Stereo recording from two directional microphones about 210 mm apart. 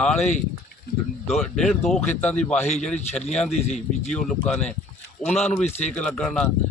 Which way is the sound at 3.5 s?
35° left (ahead or behind).